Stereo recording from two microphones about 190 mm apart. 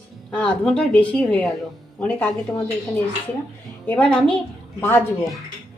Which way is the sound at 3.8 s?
5° left (ahead or behind).